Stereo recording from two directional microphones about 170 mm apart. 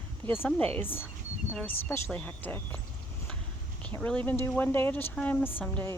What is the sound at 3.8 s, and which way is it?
Speech, 5° left (ahead or behind).